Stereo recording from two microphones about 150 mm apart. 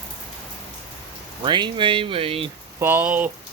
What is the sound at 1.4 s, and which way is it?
Speech, 30° right (ahead or behind).